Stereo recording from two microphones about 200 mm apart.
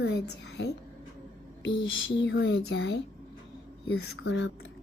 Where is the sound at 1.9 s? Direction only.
75° left (ahead or behind).